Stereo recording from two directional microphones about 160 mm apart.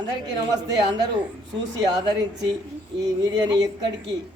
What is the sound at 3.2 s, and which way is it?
Speech, 25° right (ahead or behind).